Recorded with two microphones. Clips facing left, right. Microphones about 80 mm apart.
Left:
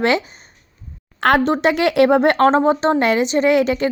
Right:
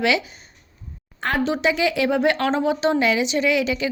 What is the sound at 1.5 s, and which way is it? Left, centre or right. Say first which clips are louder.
Speech: left 4 dB; left.